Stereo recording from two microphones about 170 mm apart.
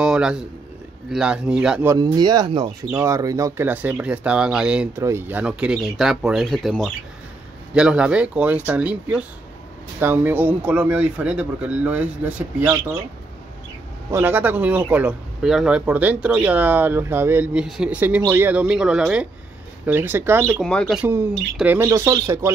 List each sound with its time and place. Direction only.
0.0 s a sound: 5° right (ahead or behind)
1.1 s speech: 5° right (ahead or behind)
1.9 s speech: 25° right (ahead or behind); by 12.7 s 10° right (ahead or behind)
14.1 s speech: 10° right (ahead or behind)
20.5 s speech: 5° left (ahead or behind)
21.0 s speech: 15° right (ahead or behind)